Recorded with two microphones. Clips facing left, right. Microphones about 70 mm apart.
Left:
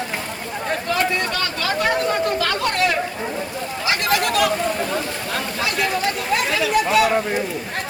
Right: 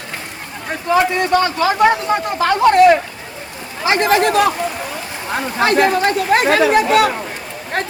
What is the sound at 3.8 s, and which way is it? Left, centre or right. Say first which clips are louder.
Speech: right 7 dB; right.